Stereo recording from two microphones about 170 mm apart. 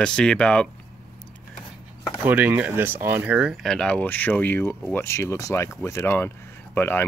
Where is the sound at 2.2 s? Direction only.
10° right (ahead or behind).